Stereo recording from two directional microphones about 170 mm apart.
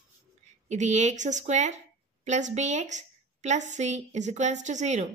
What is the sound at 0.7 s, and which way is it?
A woman's voice, 45° right (ahead or behind).